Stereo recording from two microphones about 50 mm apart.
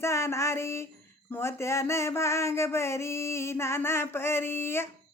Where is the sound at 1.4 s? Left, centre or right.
Left.